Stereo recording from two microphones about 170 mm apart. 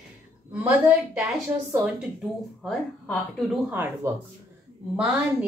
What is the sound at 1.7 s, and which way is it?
Speech, 5° right (ahead or behind).